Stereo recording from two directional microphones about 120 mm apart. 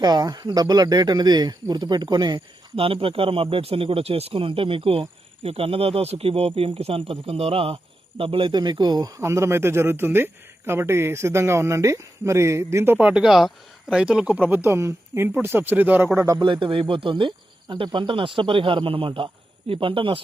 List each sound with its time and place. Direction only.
0.0 s speech: 35° right (ahead or behind)
2.7 s a man's voice: 50° right (ahead or behind); by 16.0 s 15° right (ahead or behind)
16.1 s a man's voice: 25° right (ahead or behind)
16.4 s speech: 40° right (ahead or behind)